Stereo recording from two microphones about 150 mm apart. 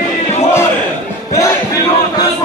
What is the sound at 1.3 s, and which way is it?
Crowd, 20° left (ahead or behind).